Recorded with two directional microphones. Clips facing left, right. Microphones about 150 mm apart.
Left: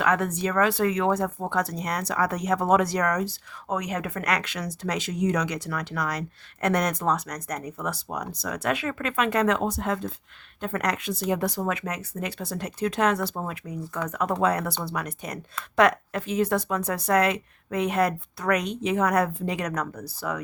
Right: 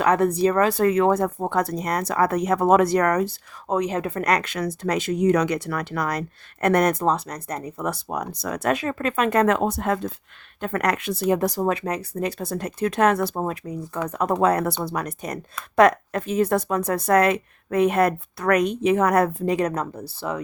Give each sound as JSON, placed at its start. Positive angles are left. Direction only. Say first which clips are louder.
{"t": 0.0, "sound": "speech", "louder": "right 6 dB", "side_deg": -35}
{"t": 3.7, "sound": "speech", "louder": "right 6 dB", "side_deg": -30}
{"t": 7.0, "sound": "speech", "louder": "right 3 dB", "side_deg": -30}
{"t": 7.9, "sound": "speech", "louder": "right 5 dB", "side_deg": -50}
{"t": 11.3, "sound": "speech", "louder": "right 5 dB", "side_deg": -40}
{"t": 13.3, "sound": "speech", "louder": "right 5 dB", "side_deg": -40}